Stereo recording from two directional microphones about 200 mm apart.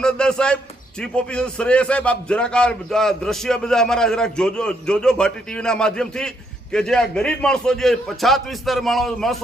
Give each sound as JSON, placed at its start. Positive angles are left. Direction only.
{"t": 0.0, "sound": "a man's voice", "side_deg": 5}